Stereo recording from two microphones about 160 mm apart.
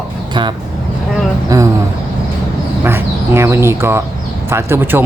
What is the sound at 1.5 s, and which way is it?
Speech, 20° right (ahead or behind).